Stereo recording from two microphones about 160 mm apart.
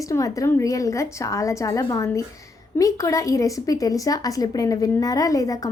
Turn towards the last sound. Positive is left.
turn(degrees=20)  # may be behind; listen again after turning